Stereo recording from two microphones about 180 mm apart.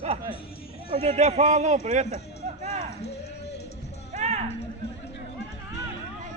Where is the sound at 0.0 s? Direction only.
35° right (ahead or behind).